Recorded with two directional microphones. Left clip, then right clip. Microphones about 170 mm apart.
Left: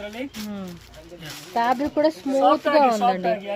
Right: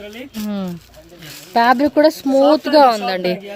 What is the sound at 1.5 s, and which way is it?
Speech, 90° right.